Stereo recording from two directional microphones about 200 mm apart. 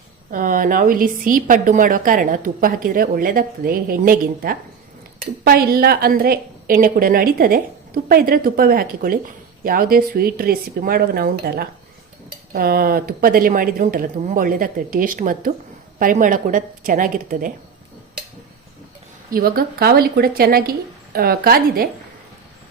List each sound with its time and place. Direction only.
0.3 s a woman's voice: 40° right (ahead or behind)
19.3 s a woman's voice: 45° right (ahead or behind)